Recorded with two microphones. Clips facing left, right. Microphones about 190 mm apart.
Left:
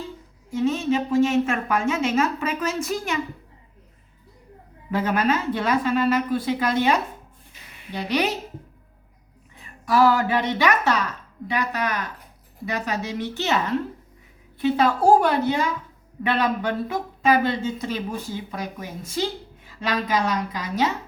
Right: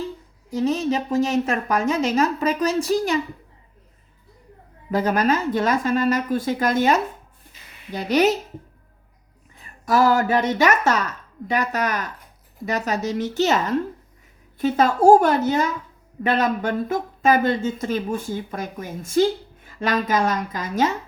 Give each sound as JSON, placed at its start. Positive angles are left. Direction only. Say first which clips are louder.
{"t": 0.5, "sound": "a woman's voice", "louder": "right 1 dB", "side_deg": -40}
{"t": 4.9, "sound": "speech", "louder": "right 2 dB", "side_deg": -40}
{"t": 9.8, "sound": "speech", "louder": "right 1 dB", "side_deg": -45}